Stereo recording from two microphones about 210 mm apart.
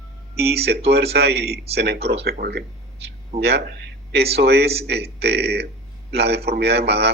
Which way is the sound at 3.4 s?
50° right (ahead or behind).